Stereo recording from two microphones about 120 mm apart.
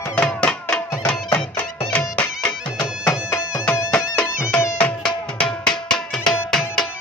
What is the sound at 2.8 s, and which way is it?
Music, 20° left (ahead or behind).